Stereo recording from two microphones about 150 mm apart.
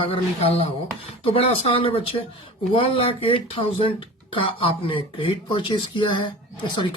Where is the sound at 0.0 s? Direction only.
40° left (ahead or behind).